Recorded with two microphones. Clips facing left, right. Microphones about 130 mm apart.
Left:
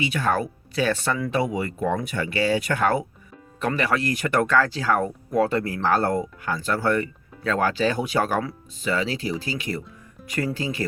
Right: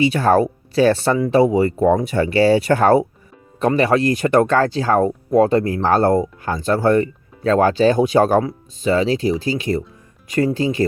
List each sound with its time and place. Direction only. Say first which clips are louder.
0.0 s speech: right 9 dB; 35° right (ahead or behind)